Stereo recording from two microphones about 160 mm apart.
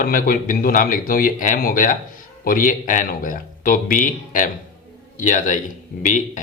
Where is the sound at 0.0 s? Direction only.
60° left (ahead or behind).